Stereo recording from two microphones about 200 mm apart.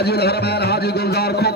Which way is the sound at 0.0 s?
55° left (ahead or behind).